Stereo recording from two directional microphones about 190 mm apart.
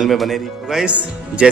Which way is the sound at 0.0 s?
Centre (ahead or behind).